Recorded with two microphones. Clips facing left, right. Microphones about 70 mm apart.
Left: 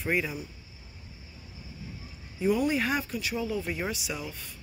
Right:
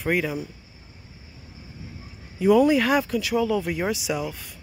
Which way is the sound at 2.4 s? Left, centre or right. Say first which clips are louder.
Right 8 dB; right.